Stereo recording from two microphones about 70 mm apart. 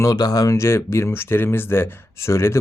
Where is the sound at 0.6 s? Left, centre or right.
Left.